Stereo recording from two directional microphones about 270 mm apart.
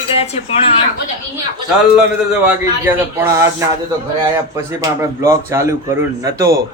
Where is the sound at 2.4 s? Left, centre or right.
Centre.